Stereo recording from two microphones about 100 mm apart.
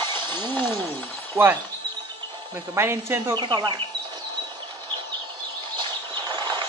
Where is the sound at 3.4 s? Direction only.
50° right (ahead or behind).